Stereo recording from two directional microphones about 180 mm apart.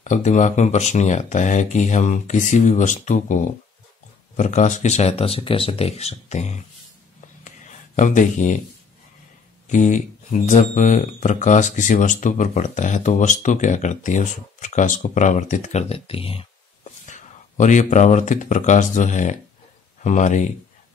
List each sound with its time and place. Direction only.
0.0 s speech: 40° left (ahead or behind)
7.4 s a sound: 45° left (ahead or behind)
9.7 s speech: 45° left (ahead or behind)
17.0 s speech: 45° left (ahead or behind)